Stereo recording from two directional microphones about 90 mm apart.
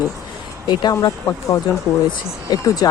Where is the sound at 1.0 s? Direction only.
40° left (ahead or behind).